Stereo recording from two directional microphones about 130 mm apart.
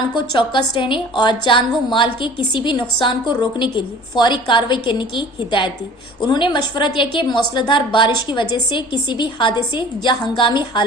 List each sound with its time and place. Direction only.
0.2 s a woman's voice: 40° left (ahead or behind)